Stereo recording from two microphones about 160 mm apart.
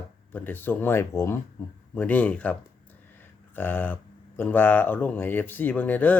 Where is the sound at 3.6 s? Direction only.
10° left (ahead or behind).